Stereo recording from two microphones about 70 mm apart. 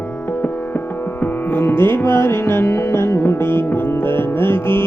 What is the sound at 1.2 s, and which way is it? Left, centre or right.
Music, left.